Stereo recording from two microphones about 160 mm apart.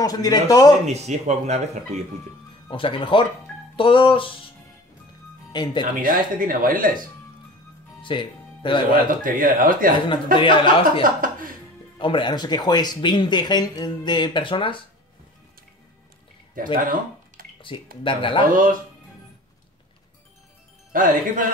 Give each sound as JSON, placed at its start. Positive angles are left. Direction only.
{"t": 0.0, "sound": "speech", "side_deg": 25}
{"t": 0.8, "sound": "a man's voice", "side_deg": -45}
{"t": 2.7, "sound": "music", "side_deg": 35}
{"t": 5.5, "sound": "speech", "side_deg": 30}
{"t": 6.0, "sound": "speech", "side_deg": -60}
{"t": 8.0, "sound": "music", "side_deg": 30}
{"t": 8.9, "sound": "speech", "side_deg": -60}
{"t": 10.3, "sound": "music", "side_deg": 30}
{"t": 11.0, "sound": "speech", "side_deg": -60}
{"t": 12.0, "sound": "speech", "side_deg": 30}
{"t": 16.8, "sound": "a sound", "side_deg": -60}
{"t": 18.0, "sound": "music", "side_deg": 30}
{"t": 18.5, "sound": "speech", "side_deg": -55}
{"t": 20.9, "sound": "speech", "side_deg": -55}